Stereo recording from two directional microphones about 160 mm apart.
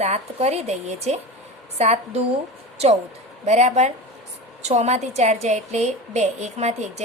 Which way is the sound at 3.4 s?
45° right (ahead or behind).